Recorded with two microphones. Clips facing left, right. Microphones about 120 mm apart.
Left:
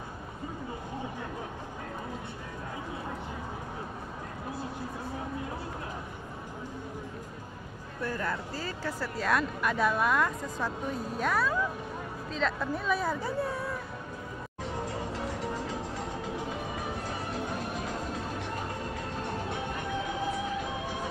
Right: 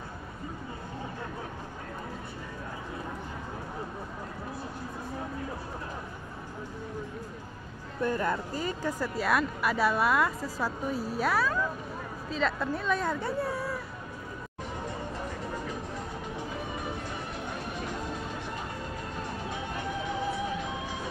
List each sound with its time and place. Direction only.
8.0 s speech: 20° right (ahead or behind); by 13.7 s centre (ahead or behind)
14.9 s music: 90° left